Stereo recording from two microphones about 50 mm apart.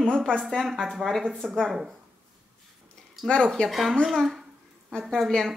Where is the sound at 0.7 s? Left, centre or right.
Centre.